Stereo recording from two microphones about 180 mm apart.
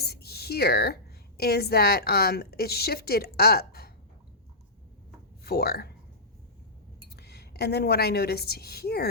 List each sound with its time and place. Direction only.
0.0 s a sound: 60° left (ahead or behind)
1.4 s a woman's voice: 60° left (ahead or behind)
5.4 s speech: 60° left (ahead or behind)
7.2 s a woman's voice: 65° left (ahead or behind)